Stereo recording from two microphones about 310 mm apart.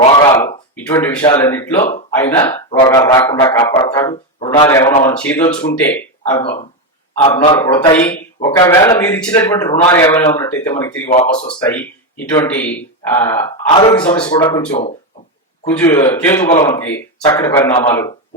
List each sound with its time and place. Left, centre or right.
0.0 s a sound: centre
0.9 s speech: centre
11.0 s speech: left
11.4 s speech: centre
16.0 s speech: centre